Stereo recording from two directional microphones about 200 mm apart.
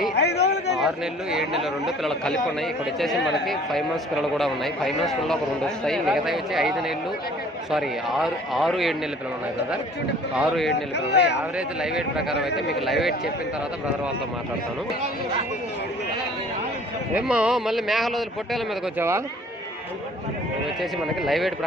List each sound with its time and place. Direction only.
0.2 s a sound: 55° left (ahead or behind)
0.8 s a man's voice: centre (ahead or behind)
3.2 s speech: 60° left (ahead or behind)
3.4 s a man's voice: centre (ahead or behind)
10.3 s a man's voice: centre (ahead or behind)
10.7 s speech: 60° left (ahead or behind)
11.5 s a man's voice: 5° right (ahead or behind)
17.2 s a man's voice: 5° right (ahead or behind)
21.2 s a man's voice: centre (ahead or behind)